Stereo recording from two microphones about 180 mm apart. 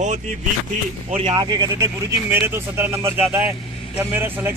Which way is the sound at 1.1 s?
25° right (ahead or behind).